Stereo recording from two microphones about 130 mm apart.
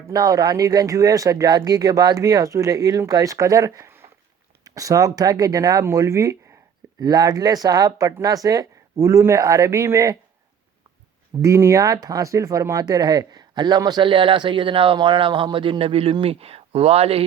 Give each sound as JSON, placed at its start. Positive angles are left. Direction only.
{"t": 0.1, "sound": "speech", "side_deg": -25}
{"t": 11.4, "sound": "speech", "side_deg": -20}